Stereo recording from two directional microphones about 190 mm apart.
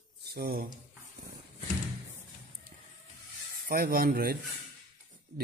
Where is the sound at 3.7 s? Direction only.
50° right (ahead or behind).